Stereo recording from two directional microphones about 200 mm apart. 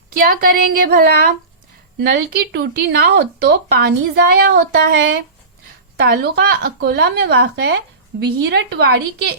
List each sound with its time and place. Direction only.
0.2 s a woman's voice: 45° right (ahead or behind)